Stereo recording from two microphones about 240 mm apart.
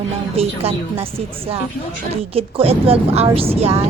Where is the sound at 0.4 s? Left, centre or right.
Right.